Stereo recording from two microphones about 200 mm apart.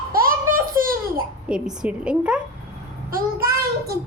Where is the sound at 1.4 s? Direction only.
5° right (ahead or behind).